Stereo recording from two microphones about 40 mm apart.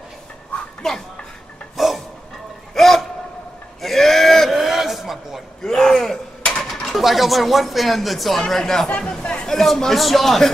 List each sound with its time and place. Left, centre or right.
0.8 s speech: centre
1.8 s a sound: centre
5.6 s a sound: centre
6.6 s speech: centre
8.4 s speech: centre
8.8 s speech: left
9.2 s chatter: left
9.5 s a man's voice: centre